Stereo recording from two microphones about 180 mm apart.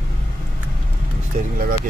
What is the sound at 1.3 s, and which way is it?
Vehicle, 50° right (ahead or behind).